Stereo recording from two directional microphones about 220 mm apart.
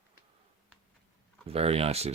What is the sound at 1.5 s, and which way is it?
Speech, 25° right (ahead or behind).